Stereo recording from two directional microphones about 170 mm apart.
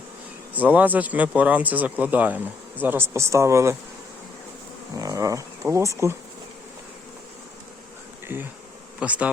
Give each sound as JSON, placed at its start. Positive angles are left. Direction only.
{"t": 0.5, "sound": "speech", "side_deg": -10}
{"t": 4.9, "sound": "insect", "side_deg": -20}
{"t": 9.0, "sound": "speech", "side_deg": -5}